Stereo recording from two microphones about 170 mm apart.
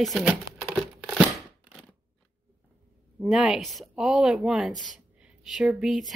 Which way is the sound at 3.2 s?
5° right (ahead or behind).